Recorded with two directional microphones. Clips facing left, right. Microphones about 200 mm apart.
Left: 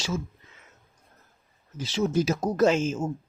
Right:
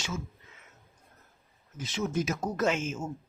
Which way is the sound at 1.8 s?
35° left (ahead or behind).